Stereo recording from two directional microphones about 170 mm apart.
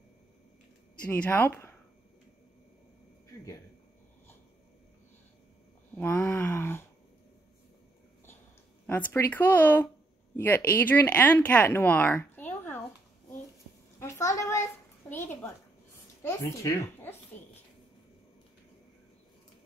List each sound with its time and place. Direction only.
1.0 s speech: 10° left (ahead or behind)
5.9 s speech: 10° left (ahead or behind)
8.8 s speech: 10° left (ahead or behind)
13.9 s a sound: 15° left (ahead or behind)
16.2 s speech: 15° left (ahead or behind)